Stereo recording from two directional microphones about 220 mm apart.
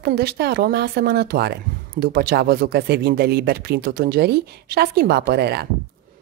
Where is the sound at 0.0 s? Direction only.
45° right (ahead or behind).